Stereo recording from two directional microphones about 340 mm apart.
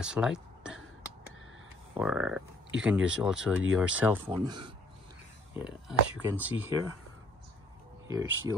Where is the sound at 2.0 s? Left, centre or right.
Centre.